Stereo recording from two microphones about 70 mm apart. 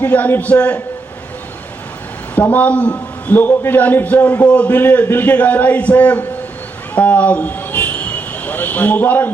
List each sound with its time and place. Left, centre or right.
0.0 s a man's voice: left
2.3 s a man's voice: left
6.9 s vehicle: left